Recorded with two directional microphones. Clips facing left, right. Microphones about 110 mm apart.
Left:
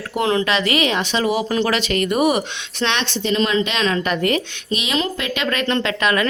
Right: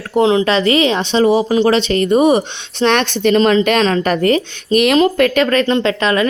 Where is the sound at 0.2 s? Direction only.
20° right (ahead or behind).